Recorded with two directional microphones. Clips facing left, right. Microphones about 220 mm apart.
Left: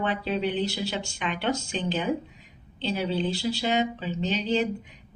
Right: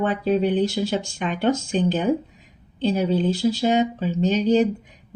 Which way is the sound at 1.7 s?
50° right (ahead or behind).